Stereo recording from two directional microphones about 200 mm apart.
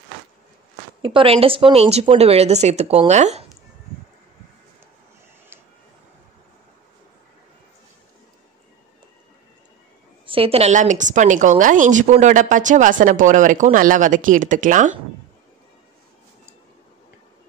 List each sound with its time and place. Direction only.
1.0 s a woman's voice: 25° right (ahead or behind)
10.2 s a woman's voice: 25° right (ahead or behind)